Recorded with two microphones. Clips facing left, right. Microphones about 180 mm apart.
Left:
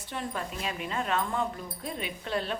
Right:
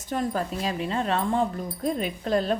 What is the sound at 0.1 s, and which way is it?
A woman's voice, 40° right (ahead or behind).